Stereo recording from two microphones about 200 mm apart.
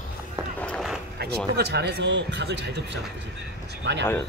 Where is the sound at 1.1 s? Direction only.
55° right (ahead or behind).